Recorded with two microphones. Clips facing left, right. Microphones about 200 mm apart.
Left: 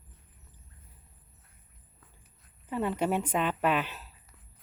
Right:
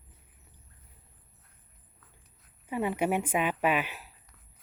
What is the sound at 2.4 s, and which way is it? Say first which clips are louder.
Speech: even; 10° right (ahead or behind).